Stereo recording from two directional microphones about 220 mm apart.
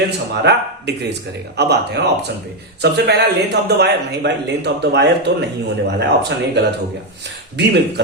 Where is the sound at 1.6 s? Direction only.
50° right (ahead or behind).